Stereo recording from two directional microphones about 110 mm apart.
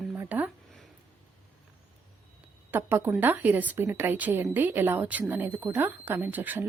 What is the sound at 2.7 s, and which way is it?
A woman's voice, 20° right (ahead or behind).